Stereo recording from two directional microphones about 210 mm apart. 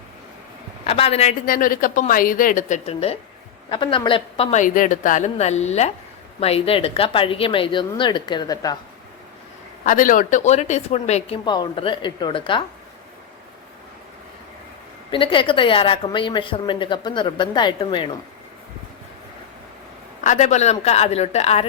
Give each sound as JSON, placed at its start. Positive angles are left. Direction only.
{"t": 0.9, "sound": "a woman's voice", "side_deg": 30}
{"t": 1.5, "sound": "a woman's voice", "side_deg": 40}
{"t": 9.8, "sound": "speech", "side_deg": 40}
{"t": 15.1, "sound": "a woman's voice", "side_deg": 25}
{"t": 20.2, "sound": "speech", "side_deg": 35}